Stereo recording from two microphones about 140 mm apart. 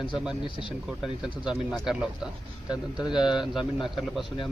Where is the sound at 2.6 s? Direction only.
30° left (ahead or behind).